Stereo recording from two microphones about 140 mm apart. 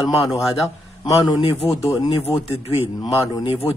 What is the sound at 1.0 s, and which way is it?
Speech, 25° left (ahead or behind).